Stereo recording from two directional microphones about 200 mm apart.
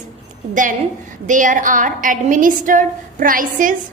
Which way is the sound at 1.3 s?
40° right (ahead or behind).